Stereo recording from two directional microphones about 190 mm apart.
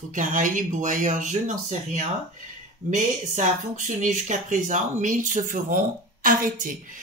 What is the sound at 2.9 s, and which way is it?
A woman's voice, 40° right (ahead or behind).